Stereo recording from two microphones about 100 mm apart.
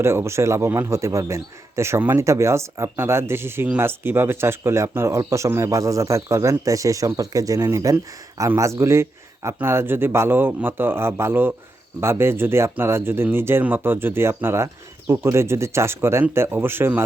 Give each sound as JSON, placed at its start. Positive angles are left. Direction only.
{"t": 0.0, "sound": "speech", "side_deg": -25}